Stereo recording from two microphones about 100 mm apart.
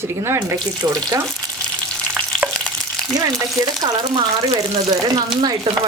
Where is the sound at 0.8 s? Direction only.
40° right (ahead or behind).